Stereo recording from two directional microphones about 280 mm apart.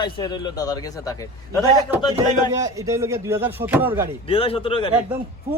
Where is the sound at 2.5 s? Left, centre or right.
Centre.